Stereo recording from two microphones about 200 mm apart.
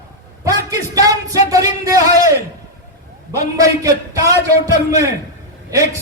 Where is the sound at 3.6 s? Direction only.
15° right (ahead or behind).